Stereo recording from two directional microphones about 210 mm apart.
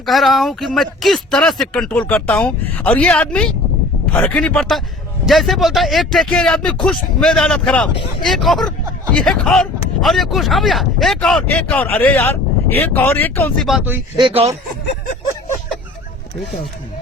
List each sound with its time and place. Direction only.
0.0 s speech: centre (ahead or behind)
14.2 s speech: 25° right (ahead or behind)